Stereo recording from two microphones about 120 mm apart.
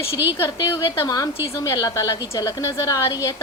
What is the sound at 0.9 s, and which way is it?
A woman's voice, 30° left (ahead or behind).